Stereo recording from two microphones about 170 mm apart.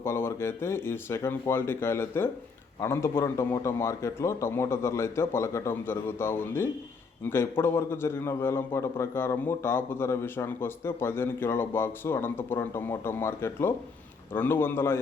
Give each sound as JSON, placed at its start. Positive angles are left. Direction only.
{"t": 0.0, "sound": "a man's voice", "side_deg": 15}